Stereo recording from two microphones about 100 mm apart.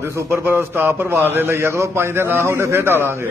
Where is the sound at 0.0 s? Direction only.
25° right (ahead or behind).